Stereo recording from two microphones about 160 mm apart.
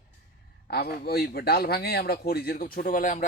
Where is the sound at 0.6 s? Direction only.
80° left; by 3.2 s 55° left (ahead or behind).